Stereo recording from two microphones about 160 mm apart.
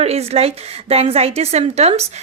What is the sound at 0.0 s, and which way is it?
A woman's voice, 40° right (ahead or behind).